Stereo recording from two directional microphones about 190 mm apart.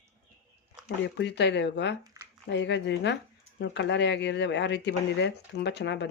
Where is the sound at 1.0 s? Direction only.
65° left (ahead or behind).